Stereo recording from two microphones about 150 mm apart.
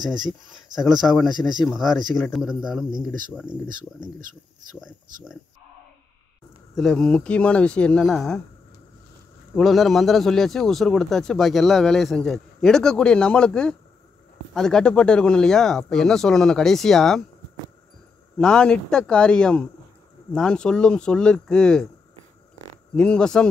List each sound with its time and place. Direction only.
0.0 s speech: 5° right (ahead or behind)
6.7 s speech: 5° left (ahead or behind)
9.6 s speech: centre (ahead or behind)
18.4 s speech: 5° left (ahead or behind)
22.9 s speech: 5° left (ahead or behind)